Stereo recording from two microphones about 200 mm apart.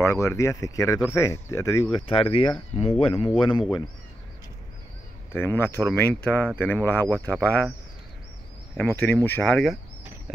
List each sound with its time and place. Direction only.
0.0 s speech: 15° left (ahead or behind)
5.3 s speech: 10° left (ahead or behind)
8.7 s speech: 10° left (ahead or behind)